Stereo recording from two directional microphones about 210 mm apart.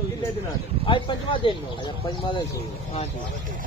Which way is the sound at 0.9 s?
25° left (ahead or behind).